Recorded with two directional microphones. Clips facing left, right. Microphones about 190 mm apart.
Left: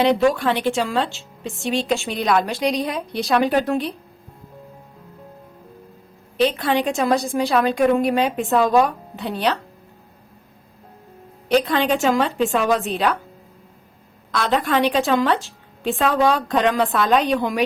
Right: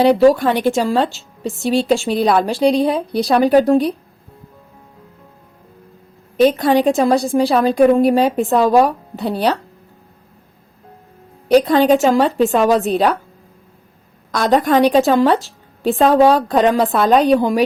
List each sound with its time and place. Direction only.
0.2 s a woman's voice: 40° right (ahead or behind)
6.3 s a woman's voice: 45° right (ahead or behind)
11.4 s a woman's voice: 35° right (ahead or behind)
14.3 s a woman's voice: 40° right (ahead or behind)